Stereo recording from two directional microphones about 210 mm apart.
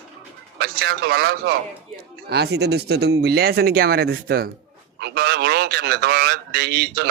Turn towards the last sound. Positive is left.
turn(degrees=-50)  # may be behind; listen again after turning